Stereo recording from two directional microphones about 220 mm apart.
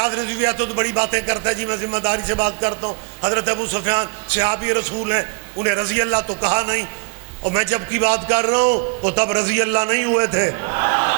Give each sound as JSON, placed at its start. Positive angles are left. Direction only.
{"t": 0.0, "sound": "a man's voice", "side_deg": -10}